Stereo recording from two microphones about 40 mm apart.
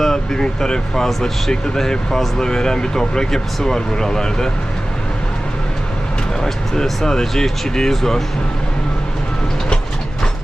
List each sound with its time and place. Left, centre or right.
0.0 s speech: centre
6.8 s speech: centre